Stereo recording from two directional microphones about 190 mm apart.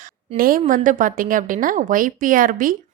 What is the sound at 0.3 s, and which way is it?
A woman's voice, 50° right (ahead or behind).